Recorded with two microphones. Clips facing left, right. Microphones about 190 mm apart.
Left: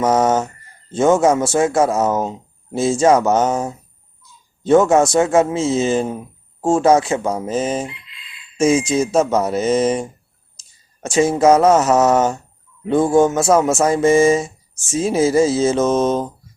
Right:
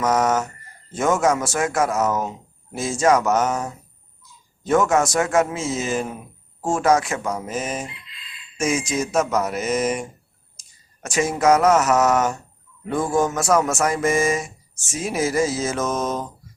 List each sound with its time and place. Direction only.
0.0 s speech: 30° left (ahead or behind)